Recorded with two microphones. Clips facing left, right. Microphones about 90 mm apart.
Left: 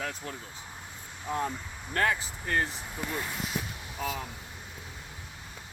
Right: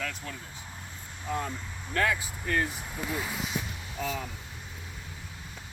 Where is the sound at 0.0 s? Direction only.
35° left (ahead or behind).